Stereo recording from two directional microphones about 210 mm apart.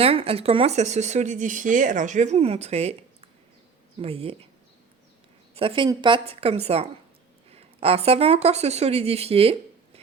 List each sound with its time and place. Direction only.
0.0 s a woman's voice: 25° right (ahead or behind)
5.5 s a woman's voice: 25° right (ahead or behind)